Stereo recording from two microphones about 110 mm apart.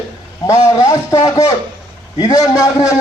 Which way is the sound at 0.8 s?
30° left (ahead or behind).